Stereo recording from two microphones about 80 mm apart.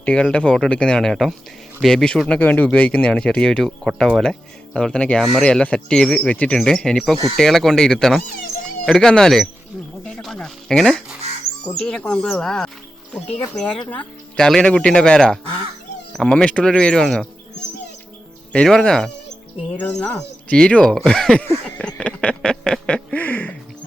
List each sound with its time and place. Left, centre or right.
0.0 s speech: centre
6.6 s speech: centre
18.5 s speech: centre
22.4 s a sound: centre
23.1 s music: centre